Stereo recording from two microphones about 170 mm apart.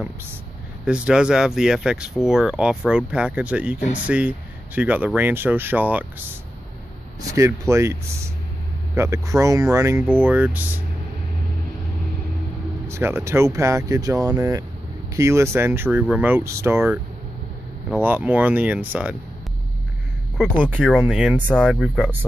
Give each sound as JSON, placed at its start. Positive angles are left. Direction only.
{"t": 0.8, "sound": "speech", "side_deg": -5}
{"t": 7.3, "sound": "speech", "side_deg": -15}
{"t": 12.8, "sound": "speech", "side_deg": -15}
{"t": 17.9, "sound": "speech", "side_deg": -10}
{"t": 20.3, "sound": "speech", "side_deg": -10}